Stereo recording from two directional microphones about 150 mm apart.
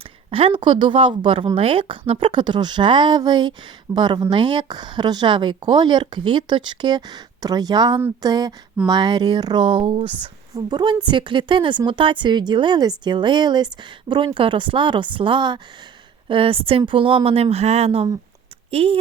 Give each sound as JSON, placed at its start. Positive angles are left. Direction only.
{"t": 0.3, "sound": "a woman's voice", "side_deg": -35}